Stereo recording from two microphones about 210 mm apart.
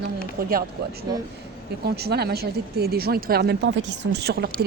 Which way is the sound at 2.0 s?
50° right (ahead or behind).